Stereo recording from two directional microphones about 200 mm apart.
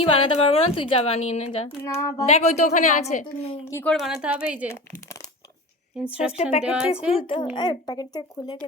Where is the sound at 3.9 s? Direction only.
Centre (ahead or behind).